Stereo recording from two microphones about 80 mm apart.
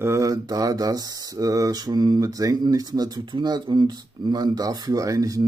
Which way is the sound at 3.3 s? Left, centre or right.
Right.